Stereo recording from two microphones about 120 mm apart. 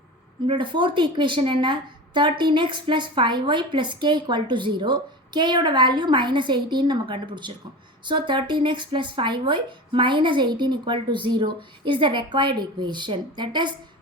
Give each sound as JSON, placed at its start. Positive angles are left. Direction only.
{"t": 0.4, "sound": "a woman's voice", "side_deg": -40}